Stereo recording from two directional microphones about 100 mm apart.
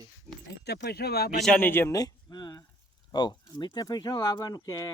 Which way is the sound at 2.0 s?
40° left (ahead or behind).